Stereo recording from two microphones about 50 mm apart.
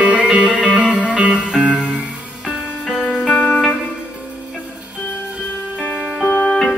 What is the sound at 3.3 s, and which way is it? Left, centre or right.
Music, left.